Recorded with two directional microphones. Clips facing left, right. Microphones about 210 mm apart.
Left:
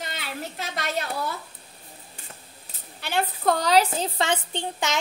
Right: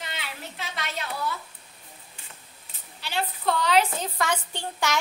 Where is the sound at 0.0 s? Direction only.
40° left (ahead or behind).